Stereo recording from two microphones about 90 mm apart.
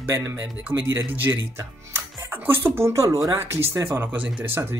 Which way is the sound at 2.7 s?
35° right (ahead or behind).